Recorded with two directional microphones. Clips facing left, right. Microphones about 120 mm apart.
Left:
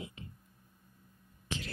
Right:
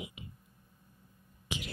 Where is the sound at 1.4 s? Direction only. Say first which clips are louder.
Even; 15° right (ahead or behind).